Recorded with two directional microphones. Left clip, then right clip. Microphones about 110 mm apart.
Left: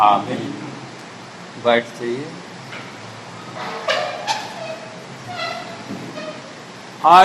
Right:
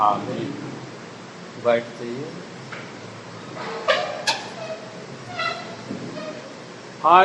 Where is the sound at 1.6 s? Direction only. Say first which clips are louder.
Left 4 dB; 35° left (ahead or behind).